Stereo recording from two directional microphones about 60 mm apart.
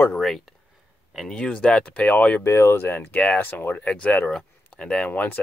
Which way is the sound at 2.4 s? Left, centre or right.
Left.